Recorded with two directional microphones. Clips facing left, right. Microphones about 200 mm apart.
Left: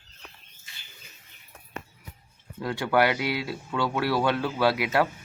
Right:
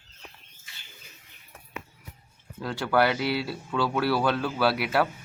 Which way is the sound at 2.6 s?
5° left (ahead or behind).